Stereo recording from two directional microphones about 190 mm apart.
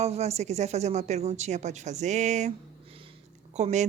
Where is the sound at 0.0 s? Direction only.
35° right (ahead or behind).